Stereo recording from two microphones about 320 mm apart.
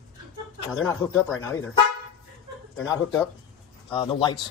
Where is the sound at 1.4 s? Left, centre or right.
Centre.